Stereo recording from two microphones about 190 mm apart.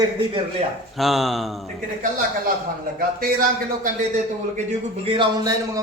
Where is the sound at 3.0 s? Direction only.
45° right (ahead or behind).